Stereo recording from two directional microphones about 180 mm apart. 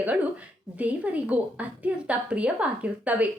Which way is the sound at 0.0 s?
10° right (ahead or behind).